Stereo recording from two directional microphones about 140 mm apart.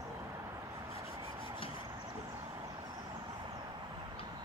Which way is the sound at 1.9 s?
30° right (ahead or behind).